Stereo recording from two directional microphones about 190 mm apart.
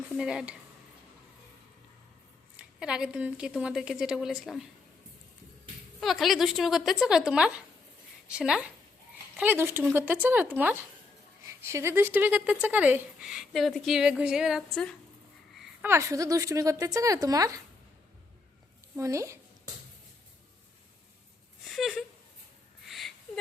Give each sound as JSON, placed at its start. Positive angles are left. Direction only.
{"t": 0.2, "sound": "a woman's voice", "side_deg": -5}
{"t": 2.6, "sound": "a woman's voice", "side_deg": -5}
{"t": 6.0, "sound": "a woman's voice", "side_deg": 0}
{"t": 15.5, "sound": "a woman's voice", "side_deg": -10}
{"t": 18.9, "sound": "a woman's voice", "side_deg": -15}
{"t": 21.6, "sound": "a sound", "side_deg": 0}